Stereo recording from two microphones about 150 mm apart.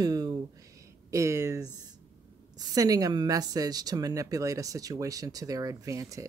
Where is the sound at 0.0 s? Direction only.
25° right (ahead or behind).